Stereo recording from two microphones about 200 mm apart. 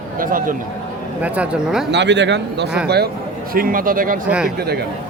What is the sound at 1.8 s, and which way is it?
Speech, 60° right (ahead or behind).